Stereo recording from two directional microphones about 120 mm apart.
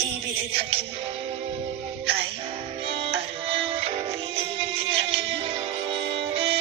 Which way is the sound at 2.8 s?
50° right (ahead or behind).